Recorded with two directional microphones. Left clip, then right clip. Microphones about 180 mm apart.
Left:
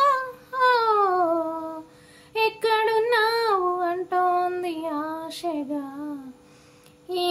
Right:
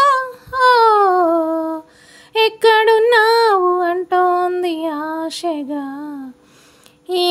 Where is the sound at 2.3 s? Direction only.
50° right (ahead or behind).